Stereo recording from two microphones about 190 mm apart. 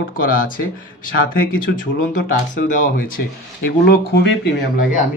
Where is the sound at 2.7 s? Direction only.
45° left (ahead or behind).